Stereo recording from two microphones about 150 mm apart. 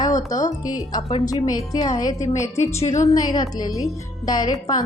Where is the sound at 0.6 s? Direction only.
25° left (ahead or behind).